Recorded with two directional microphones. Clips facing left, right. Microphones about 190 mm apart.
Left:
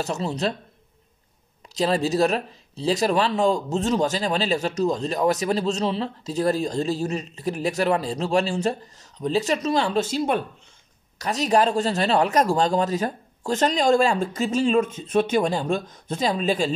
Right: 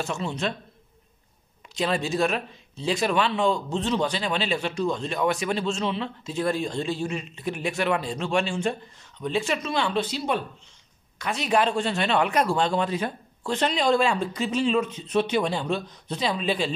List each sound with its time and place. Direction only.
0.0 s speech: 35° left (ahead or behind)
1.8 s speech: 35° left (ahead or behind)